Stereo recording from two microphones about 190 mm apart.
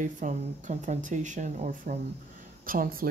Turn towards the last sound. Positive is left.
turn(degrees=-50)  # may be behind; listen again after turning